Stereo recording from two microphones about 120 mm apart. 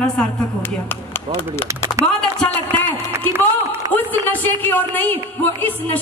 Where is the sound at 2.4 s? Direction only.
10° left (ahead or behind).